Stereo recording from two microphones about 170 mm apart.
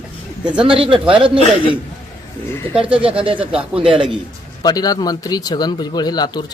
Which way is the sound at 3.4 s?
5° right (ahead or behind).